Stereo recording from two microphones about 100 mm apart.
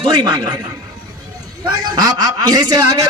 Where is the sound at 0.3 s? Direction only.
45° right (ahead or behind).